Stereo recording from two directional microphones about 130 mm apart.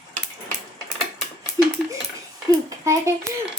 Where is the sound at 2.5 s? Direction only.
25° right (ahead or behind).